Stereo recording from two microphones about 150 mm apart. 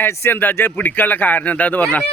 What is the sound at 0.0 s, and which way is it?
Speech, 15° left (ahead or behind).